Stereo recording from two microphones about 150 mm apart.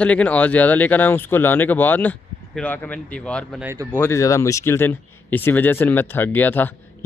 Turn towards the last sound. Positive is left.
turn(degrees=10)  # may be behind; listen again after turning